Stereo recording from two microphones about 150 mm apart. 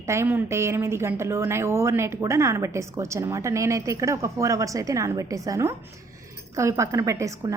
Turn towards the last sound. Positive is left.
turn(degrees=-20)  # may be behind; listen again after turning